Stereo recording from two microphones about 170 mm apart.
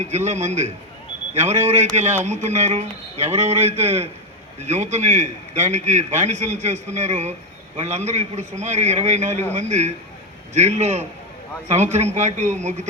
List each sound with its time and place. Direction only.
0.3 s a man's voice: 40° right (ahead or behind)